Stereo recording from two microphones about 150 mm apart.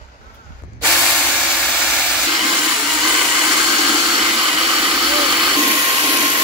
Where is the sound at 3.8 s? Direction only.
25° right (ahead or behind).